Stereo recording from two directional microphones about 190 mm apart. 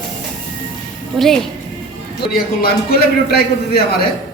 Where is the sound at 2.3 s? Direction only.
55° left (ahead or behind).